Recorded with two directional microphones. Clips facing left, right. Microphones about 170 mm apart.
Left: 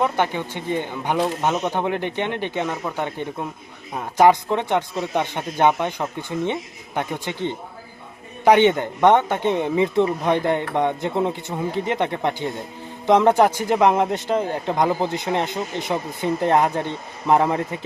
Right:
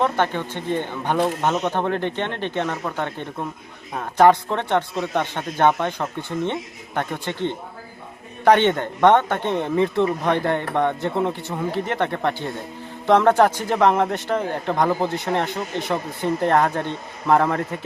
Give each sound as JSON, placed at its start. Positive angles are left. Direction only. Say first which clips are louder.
{"t": 0.0, "sound": "a man's voice", "louder": "even", "side_deg": 15}